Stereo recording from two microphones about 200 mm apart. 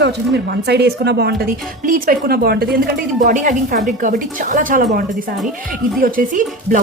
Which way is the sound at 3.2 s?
40° right (ahead or behind).